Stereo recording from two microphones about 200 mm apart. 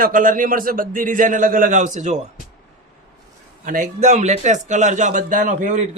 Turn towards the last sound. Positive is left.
turn(degrees=-40)  # may be behind; listen again after turning